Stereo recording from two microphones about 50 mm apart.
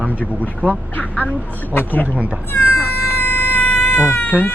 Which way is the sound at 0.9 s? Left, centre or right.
Left.